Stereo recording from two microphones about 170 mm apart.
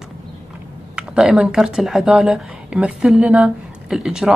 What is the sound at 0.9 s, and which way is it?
Speech, 5° right (ahead or behind).